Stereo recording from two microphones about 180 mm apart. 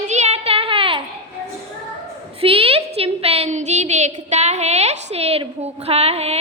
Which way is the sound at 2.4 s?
30° right (ahead or behind).